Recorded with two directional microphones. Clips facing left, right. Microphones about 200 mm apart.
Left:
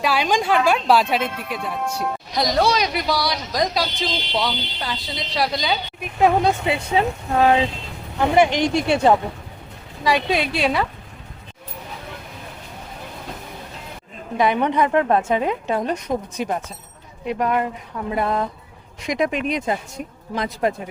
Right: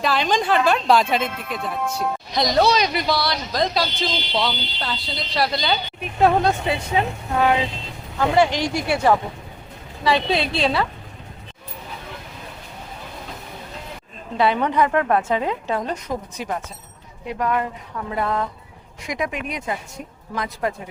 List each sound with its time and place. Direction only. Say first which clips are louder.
0.0 s speech: even; 10° left (ahead or behind)
8.2 s a woman's voice: left 2 dB; 20° left (ahead or behind)
14.3 s a woman's voice: even; 15° left (ahead or behind)